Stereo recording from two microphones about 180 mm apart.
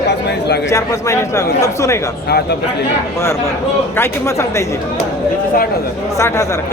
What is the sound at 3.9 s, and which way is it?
Speech, 15° left (ahead or behind).